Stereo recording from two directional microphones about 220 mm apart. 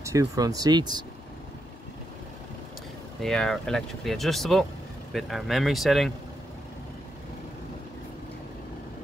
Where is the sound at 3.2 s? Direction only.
Centre (ahead or behind).